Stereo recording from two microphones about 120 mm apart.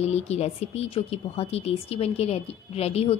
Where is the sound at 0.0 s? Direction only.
60° left (ahead or behind).